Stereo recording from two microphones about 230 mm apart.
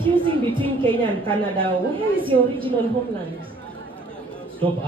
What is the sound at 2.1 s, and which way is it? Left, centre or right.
Speech, right.